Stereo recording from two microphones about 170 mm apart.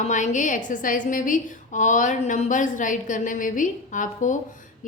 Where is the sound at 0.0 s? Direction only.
45° left (ahead or behind).